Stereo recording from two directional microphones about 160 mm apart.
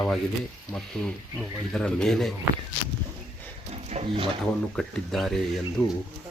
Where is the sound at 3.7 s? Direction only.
40° right (ahead or behind).